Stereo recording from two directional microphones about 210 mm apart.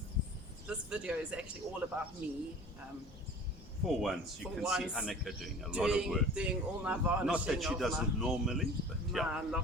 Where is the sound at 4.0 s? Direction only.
Centre (ahead or behind).